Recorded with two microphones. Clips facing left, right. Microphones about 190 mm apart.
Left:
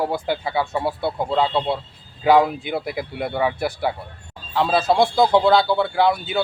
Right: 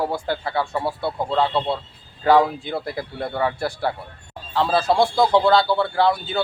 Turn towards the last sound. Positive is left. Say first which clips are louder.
# left 1 dB
turn(degrees=5)  # may be behind; listen again after turning